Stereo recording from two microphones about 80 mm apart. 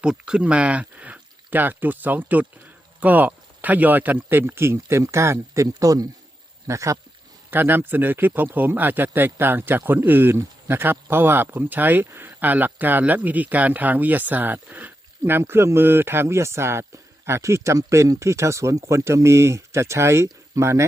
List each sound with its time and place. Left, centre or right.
0.0 s speech: centre; by 5.6 s right
5.6 s speech: right
7.5 s speech: right